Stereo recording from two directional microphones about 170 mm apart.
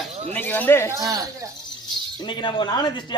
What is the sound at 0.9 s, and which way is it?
Speech, 20° right (ahead or behind).